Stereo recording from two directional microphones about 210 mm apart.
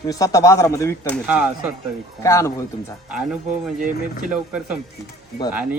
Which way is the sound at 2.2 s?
15° left (ahead or behind).